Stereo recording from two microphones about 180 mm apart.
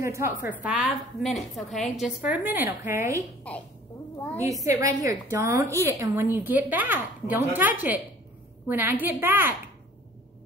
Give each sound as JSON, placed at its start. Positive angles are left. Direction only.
{"t": 0.0, "sound": "a woman's voice", "side_deg": -15}
{"t": 3.5, "sound": "a sound", "side_deg": 5}
{"t": 4.4, "sound": "a woman's voice", "side_deg": -20}